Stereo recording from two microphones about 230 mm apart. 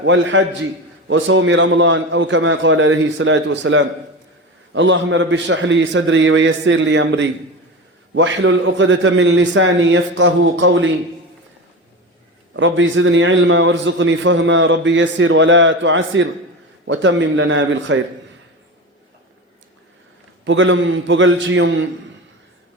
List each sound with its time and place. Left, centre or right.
0.0 s a man's voice: right
12.5 s a man's voice: right
20.4 s a man's voice: right